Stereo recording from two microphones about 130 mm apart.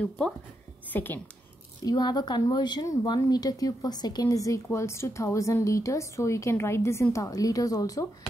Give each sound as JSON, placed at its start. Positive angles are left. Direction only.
{"t": 0.8, "sound": "a woman's voice", "side_deg": 15}
{"t": 1.9, "sound": "a woman's voice", "side_deg": 30}